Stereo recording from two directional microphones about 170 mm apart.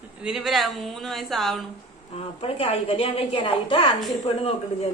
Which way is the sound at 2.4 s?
35° left (ahead or behind).